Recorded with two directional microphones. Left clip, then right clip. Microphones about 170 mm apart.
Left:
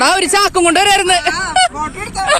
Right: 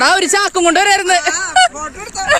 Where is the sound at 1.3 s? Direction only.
35° left (ahead or behind).